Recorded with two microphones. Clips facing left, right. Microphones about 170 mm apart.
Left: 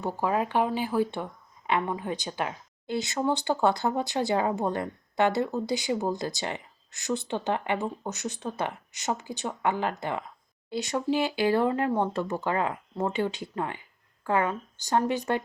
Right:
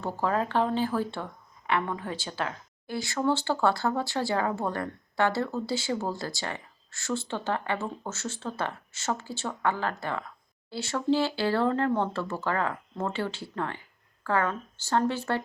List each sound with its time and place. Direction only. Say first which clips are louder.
0.0 s speech: left 1 dB; 15° left (ahead or behind)